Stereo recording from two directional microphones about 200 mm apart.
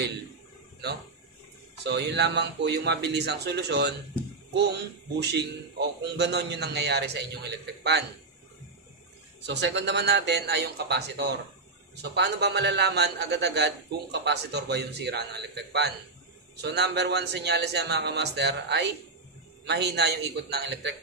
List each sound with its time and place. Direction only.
1.8 s a man's voice: 60° right (ahead or behind)
5.2 s a man's voice: 55° right (ahead or behind)
9.4 s a man's voice: 60° right (ahead or behind)